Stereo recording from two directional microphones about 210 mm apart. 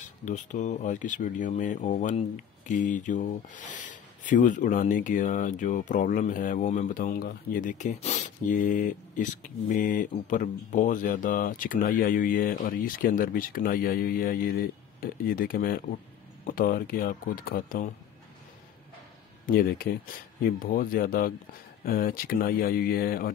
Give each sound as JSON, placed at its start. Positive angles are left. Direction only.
{"t": 0.2, "sound": "speech", "side_deg": 35}
{"t": 19.4, "sound": "speech", "side_deg": 45}